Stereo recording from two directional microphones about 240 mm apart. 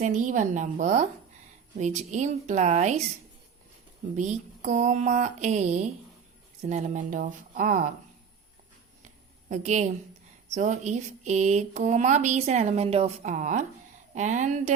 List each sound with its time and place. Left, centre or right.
0.0 s speech: right
4.1 s speech: right
9.5 s speech: right